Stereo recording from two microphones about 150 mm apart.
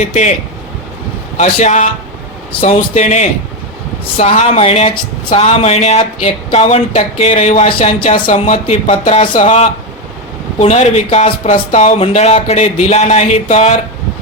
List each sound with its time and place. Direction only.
0.0 s speech: 50° left (ahead or behind)
1.4 s speech: 50° left (ahead or behind)
2.5 s speech: 40° left (ahead or behind)